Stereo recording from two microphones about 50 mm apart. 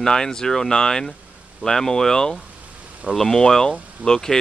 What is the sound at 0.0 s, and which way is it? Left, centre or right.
Speech, centre.